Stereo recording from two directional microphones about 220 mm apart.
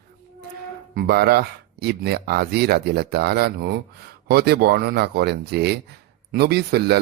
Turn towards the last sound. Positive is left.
turn(degrees=-45)  # may be behind; listen again after turning